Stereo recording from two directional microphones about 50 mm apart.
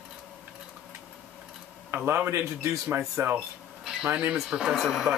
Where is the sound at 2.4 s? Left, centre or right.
Right.